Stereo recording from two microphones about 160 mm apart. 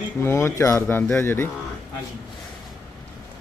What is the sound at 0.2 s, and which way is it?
Speech, 15° left (ahead or behind).